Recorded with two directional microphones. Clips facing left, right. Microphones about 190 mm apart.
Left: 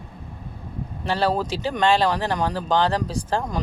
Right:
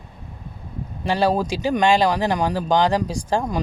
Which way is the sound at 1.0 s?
15° right (ahead or behind).